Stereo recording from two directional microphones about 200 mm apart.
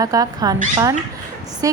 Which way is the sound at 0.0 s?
15° right (ahead or behind).